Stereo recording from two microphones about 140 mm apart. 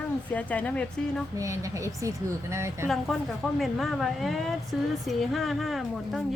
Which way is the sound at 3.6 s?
Centre (ahead or behind).